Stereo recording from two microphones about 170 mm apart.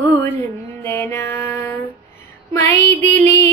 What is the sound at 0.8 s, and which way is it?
Mantra, 15° left (ahead or behind).